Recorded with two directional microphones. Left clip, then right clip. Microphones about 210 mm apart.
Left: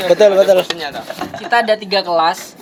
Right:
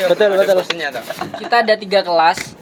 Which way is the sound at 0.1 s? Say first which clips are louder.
Left 7 dB; 35° left (ahead or behind).